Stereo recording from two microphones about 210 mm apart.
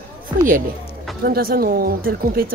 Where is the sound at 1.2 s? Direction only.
45° right (ahead or behind).